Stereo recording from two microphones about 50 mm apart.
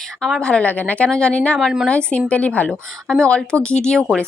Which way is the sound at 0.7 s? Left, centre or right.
Left.